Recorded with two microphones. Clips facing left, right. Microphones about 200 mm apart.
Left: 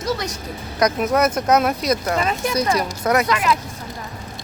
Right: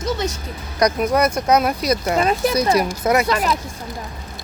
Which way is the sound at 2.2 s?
40° right (ahead or behind).